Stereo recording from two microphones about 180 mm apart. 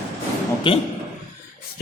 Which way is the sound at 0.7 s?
30° left (ahead or behind).